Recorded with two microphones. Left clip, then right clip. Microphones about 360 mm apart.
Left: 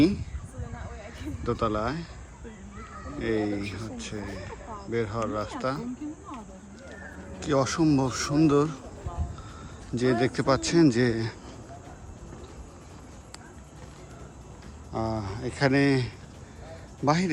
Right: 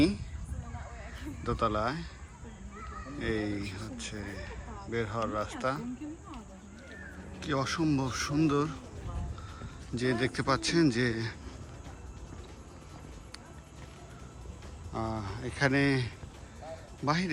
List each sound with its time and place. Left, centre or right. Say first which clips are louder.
1.2 s speech: left 3 dB; centre
3.2 s speech: left 6 dB; centre
7.4 s speech: left 7 dB; centre
10.0 s speech: left 6 dB; centre
14.9 s speech: left 5 dB; centre